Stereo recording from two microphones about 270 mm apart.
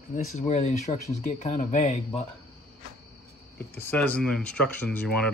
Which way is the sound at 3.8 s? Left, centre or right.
Centre.